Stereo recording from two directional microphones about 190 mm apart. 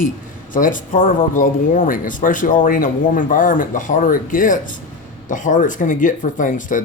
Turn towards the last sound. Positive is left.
turn(degrees=45)  # may be behind; listen again after turning